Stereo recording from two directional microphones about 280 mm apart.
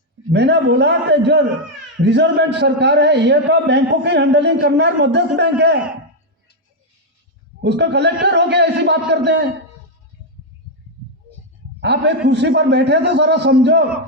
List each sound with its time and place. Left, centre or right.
0.3 s a man's voice: right
7.6 s a man's voice: right
11.8 s a man's voice: right